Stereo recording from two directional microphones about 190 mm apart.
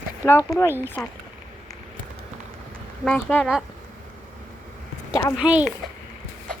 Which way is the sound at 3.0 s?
5° left (ahead or behind).